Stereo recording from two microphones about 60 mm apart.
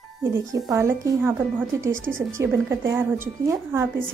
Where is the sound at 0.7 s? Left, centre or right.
Right.